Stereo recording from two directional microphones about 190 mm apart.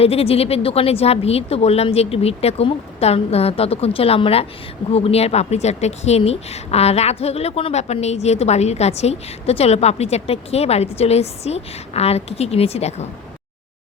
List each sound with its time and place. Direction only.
0.0 s a woman's voice: 30° left (ahead or behind)